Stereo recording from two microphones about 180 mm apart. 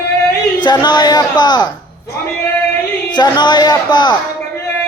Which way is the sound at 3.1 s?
25° left (ahead or behind).